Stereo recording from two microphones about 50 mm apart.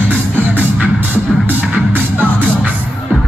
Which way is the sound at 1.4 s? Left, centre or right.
Right.